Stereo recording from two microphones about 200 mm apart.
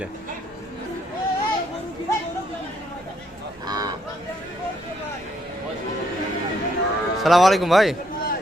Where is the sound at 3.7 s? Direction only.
20° right (ahead or behind).